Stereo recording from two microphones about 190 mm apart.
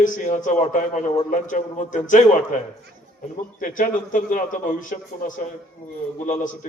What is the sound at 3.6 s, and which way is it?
A man's voice, 45° left (ahead or behind).